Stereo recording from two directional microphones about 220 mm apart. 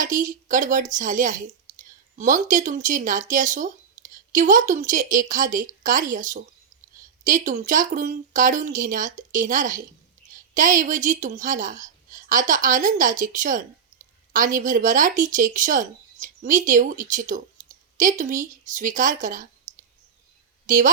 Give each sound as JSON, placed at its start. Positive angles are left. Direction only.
{"t": 0.0, "sound": "a woman's voice", "side_deg": -35}